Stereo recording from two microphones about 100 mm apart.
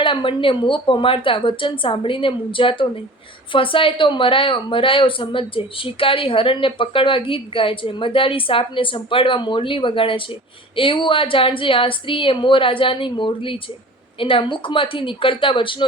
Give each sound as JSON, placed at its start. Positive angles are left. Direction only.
{"t": 0.0, "sound": "speech", "side_deg": 55}